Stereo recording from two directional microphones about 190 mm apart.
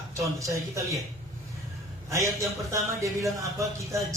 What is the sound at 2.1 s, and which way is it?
Speech, 15° right (ahead or behind).